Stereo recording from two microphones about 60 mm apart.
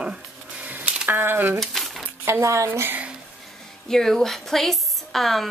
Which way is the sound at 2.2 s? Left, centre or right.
Right.